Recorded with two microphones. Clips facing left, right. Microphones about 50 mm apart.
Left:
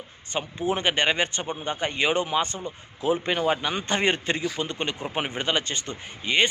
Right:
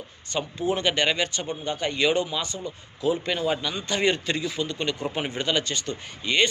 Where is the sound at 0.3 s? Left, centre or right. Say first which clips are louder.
Even; left.